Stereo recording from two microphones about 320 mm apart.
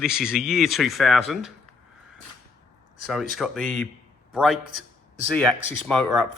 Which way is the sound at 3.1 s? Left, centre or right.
Centre.